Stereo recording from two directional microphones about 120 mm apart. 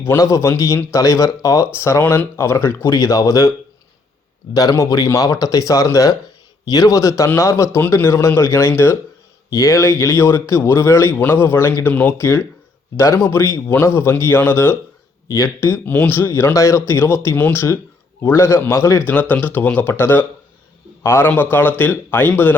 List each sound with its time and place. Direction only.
0.2 s speech: 25° left (ahead or behind)
4.5 s a man's voice: 30° left (ahead or behind)